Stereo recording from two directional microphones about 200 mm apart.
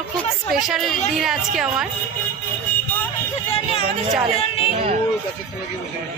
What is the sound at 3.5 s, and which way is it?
Speech, 30° left (ahead or behind).